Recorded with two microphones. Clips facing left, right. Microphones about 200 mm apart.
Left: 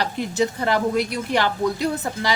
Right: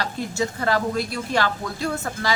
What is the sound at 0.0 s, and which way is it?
A woman's voice, 20° left (ahead or behind).